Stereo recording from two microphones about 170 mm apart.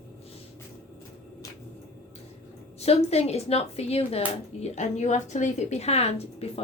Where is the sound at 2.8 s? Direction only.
40° left (ahead or behind).